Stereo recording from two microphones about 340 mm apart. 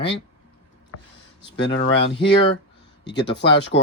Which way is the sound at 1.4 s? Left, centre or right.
Left.